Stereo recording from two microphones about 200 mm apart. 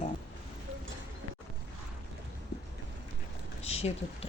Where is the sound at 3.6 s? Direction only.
30° left (ahead or behind).